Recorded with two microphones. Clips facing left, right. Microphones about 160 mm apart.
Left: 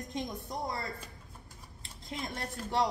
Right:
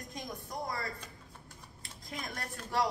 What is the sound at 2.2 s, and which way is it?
Speech, 25° left (ahead or behind).